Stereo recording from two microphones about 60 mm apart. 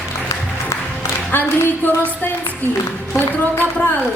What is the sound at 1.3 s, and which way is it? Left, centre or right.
A woman's voice, left.